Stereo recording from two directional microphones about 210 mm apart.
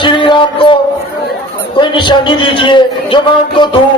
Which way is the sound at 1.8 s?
20° left (ahead or behind).